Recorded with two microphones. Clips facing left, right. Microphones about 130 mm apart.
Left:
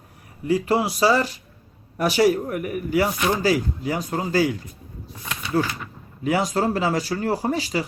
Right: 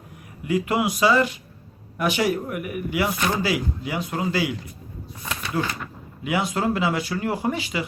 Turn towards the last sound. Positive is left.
turn(degrees=35)  # may be behind; listen again after turning